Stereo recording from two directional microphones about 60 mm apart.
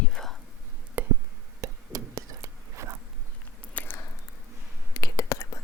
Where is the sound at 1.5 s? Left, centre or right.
Right.